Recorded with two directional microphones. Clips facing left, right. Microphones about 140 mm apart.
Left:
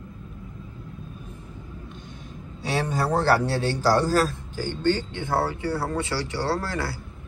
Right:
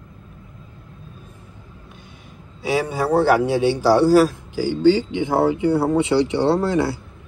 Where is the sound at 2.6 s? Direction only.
10° right (ahead or behind).